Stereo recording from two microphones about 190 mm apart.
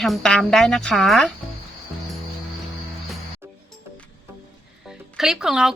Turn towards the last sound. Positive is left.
turn(degrees=-5)  # may be behind; listen again after turning